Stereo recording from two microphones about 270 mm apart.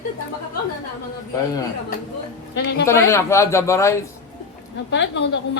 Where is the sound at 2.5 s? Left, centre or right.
Left.